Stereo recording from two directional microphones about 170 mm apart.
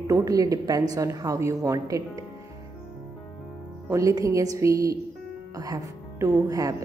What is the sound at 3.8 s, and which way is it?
A woman's voice, 20° right (ahead or behind).